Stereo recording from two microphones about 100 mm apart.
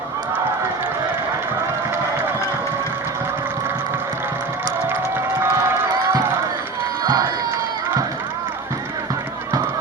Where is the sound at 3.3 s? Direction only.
20° right (ahead or behind).